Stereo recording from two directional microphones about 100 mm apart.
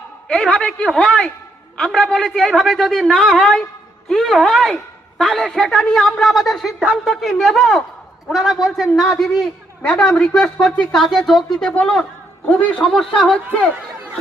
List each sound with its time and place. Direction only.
0.3 s a woman's voice: 10° left (ahead or behind)